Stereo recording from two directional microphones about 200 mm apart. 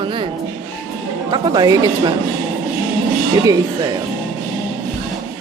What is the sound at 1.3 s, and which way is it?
Speech, 20° right (ahead or behind).